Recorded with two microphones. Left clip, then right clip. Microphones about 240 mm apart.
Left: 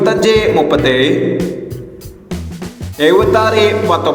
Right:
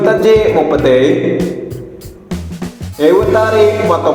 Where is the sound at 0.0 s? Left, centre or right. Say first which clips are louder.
Right 2 dB; left.